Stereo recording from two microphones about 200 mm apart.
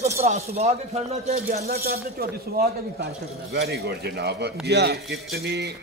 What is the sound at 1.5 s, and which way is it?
Speech, 50° right (ahead or behind).